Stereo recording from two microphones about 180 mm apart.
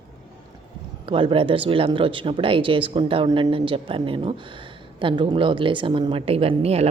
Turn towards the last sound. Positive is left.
turn(degrees=-35)  # may be behind; listen again after turning